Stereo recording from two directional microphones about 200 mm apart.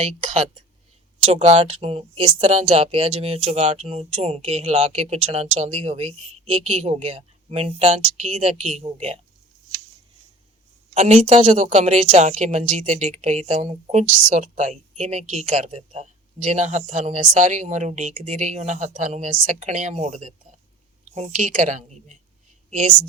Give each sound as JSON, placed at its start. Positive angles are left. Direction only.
{"t": 0.0, "sound": "a woman's voice", "side_deg": -30}
{"t": 10.9, "sound": "a woman's voice", "side_deg": -35}